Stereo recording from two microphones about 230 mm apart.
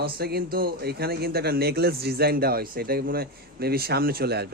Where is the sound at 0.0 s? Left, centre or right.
Right.